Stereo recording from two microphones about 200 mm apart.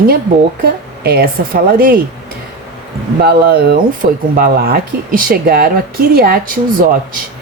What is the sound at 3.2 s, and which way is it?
Speech, 50° right (ahead or behind).